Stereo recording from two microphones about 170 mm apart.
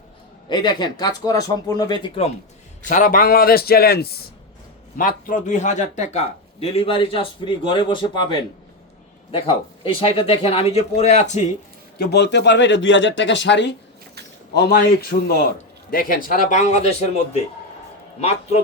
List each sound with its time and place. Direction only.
0.4 s speech: 25° left (ahead or behind)
2.8 s a man's voice: 50° left (ahead or behind); by 4.2 s 65° left (ahead or behind)
4.9 s a man's voice: 50° left (ahead or behind)
11.9 s speech: 80° left
14.5 s a man's voice: 70° left (ahead or behind)
15.1 s a man's voice: 40° left (ahead or behind)
15.9 s speech: 55° left (ahead or behind); by 17.1 s 40° left (ahead or behind)
18.2 s a man's voice: 35° left (ahead or behind)